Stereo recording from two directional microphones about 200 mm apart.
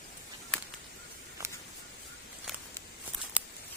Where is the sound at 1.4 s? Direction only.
15° right (ahead or behind).